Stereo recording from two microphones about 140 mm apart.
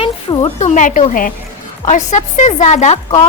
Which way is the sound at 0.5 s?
60° left (ahead or behind).